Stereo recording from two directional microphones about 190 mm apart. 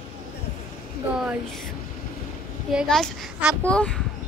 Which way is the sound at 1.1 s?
5° right (ahead or behind).